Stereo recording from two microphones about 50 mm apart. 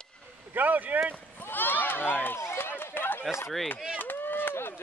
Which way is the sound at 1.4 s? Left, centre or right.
Left.